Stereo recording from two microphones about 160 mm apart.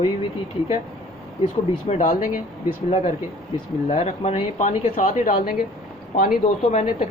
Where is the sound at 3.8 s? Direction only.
45° left (ahead or behind).